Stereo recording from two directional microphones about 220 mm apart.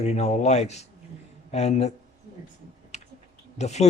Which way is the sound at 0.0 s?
30° left (ahead or behind).